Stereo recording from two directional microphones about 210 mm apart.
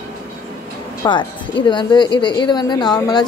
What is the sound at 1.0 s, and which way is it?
A woman's voice, 20° left (ahead or behind).